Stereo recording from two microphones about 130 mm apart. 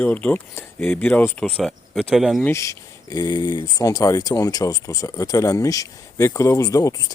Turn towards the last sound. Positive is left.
turn(degrees=25)  # may be behind; listen again after turning